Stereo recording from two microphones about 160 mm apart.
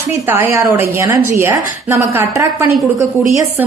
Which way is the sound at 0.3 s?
15° right (ahead or behind).